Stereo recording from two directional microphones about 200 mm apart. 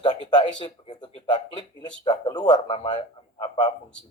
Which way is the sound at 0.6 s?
20° left (ahead or behind).